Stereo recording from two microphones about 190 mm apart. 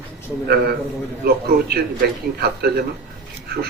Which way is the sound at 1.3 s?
55° right (ahead or behind).